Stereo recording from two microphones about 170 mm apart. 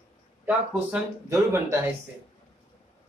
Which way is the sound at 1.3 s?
15° right (ahead or behind).